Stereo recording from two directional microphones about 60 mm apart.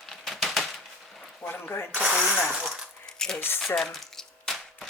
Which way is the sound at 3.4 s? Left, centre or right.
Left.